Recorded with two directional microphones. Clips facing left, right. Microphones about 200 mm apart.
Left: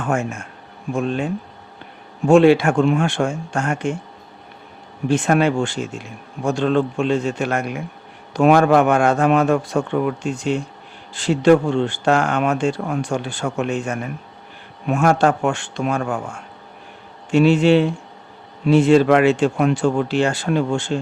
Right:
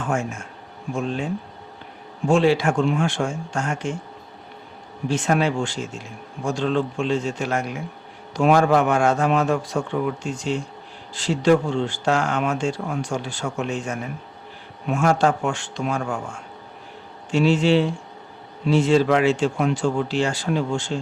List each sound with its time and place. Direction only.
0.0 s speech: 60° left (ahead or behind)
5.0 s speech: 60° left (ahead or behind)
17.3 s speech: 60° left (ahead or behind)